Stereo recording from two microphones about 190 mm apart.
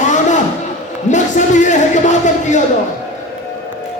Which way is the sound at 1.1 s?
40° left (ahead or behind).